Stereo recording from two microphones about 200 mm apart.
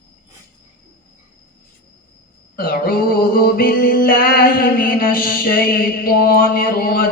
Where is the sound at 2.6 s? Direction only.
45° left (ahead or behind).